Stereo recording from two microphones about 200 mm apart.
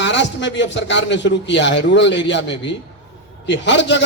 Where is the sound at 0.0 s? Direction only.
65° left (ahead or behind).